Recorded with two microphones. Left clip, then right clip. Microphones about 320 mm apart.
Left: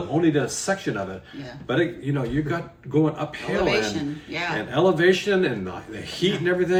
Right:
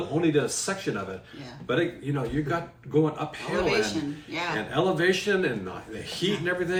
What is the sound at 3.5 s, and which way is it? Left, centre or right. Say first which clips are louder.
A woman's voice: left 3 dB; centre.